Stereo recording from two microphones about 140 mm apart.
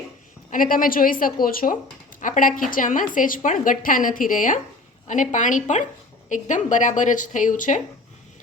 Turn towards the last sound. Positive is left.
turn(degrees=65)  # may be behind; listen again after turning